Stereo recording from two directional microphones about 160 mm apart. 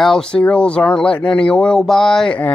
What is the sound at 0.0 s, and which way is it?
Speech, 5° left (ahead or behind).